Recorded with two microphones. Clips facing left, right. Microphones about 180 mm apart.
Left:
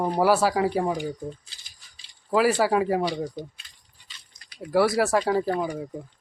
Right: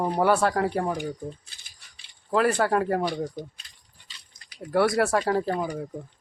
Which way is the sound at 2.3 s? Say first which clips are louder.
Left 1 dB; 5° left (ahead or behind).